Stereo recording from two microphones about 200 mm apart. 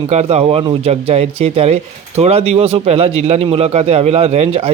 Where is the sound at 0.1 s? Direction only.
30° right (ahead or behind).